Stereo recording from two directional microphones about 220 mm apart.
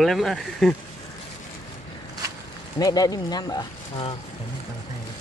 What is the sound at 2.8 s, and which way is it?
Speech, 15° left (ahead or behind).